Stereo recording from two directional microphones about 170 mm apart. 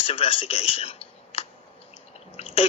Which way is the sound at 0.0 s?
35° left (ahead or behind).